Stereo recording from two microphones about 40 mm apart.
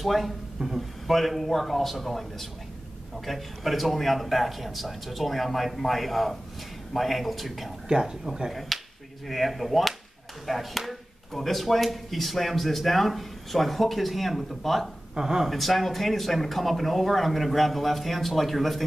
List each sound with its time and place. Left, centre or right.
0.0 s speech: centre
7.9 s speech: centre
9.3 s speech: centre
15.1 s speech: centre
15.5 s speech: centre